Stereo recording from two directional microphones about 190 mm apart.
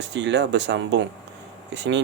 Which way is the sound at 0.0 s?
65° right (ahead or behind).